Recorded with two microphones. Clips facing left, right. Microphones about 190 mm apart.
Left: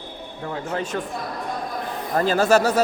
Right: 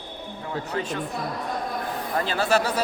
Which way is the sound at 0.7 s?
45° left (ahead or behind).